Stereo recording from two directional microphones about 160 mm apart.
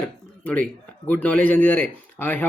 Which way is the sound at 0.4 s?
10° left (ahead or behind).